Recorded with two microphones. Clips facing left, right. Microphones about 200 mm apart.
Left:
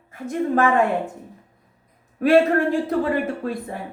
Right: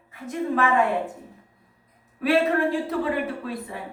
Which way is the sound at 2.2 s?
45° left (ahead or behind).